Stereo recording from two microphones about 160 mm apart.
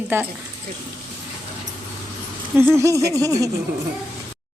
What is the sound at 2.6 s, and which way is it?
Speech, 15° right (ahead or behind).